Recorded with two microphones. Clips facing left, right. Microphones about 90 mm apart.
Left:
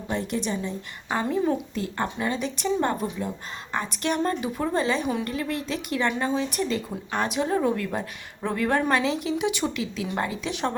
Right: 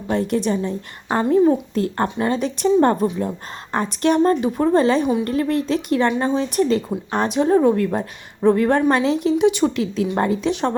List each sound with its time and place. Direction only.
0.1 s speech: 40° right (ahead or behind)